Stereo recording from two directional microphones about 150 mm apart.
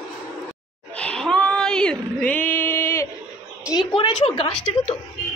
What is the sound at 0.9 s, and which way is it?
Female singing, 5° left (ahead or behind).